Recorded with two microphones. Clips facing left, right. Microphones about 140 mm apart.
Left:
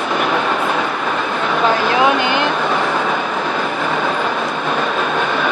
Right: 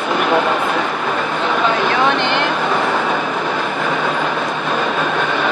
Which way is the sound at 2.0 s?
5° left (ahead or behind).